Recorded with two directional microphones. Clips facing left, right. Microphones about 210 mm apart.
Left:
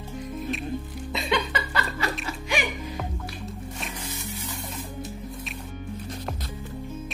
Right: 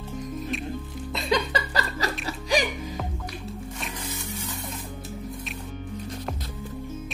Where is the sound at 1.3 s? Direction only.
35° right (ahead or behind).